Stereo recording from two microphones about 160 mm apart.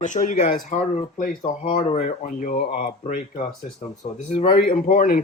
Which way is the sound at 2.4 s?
60° left (ahead or behind).